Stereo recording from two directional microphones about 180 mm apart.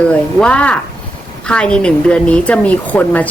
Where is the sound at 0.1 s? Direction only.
5° left (ahead or behind).